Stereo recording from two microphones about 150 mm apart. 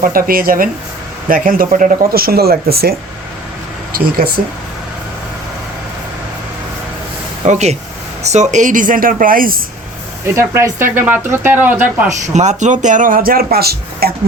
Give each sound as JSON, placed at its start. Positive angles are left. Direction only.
{"t": 0.0, "sound": "speech", "side_deg": -70}
{"t": 7.4, "sound": "speech", "side_deg": -50}
{"t": 10.3, "sound": "speech", "side_deg": -15}
{"t": 12.0, "sound": "speech", "side_deg": -50}